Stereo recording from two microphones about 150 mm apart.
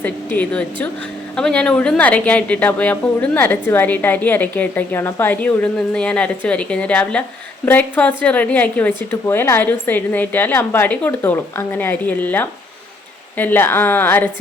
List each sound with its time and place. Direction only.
0.0 s a woman's voice: 10° left (ahead or behind)